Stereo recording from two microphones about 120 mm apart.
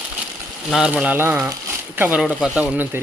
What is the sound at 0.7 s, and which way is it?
Speech, 5° right (ahead or behind).